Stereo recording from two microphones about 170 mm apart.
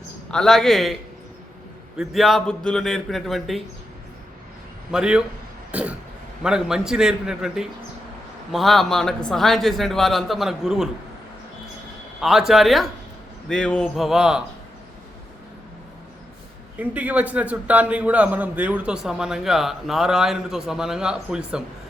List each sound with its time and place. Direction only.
0.3 s a man's voice: 5° left (ahead or behind)
2.0 s a man's voice: centre (ahead or behind)
4.9 s a man's voice: 5° right (ahead or behind)
5.7 s throat clearing: 10° right (ahead or behind)
6.4 s a man's voice: 5° right (ahead or behind)
12.2 s a man's voice: centre (ahead or behind)
16.7 s a man's voice: 10° right (ahead or behind)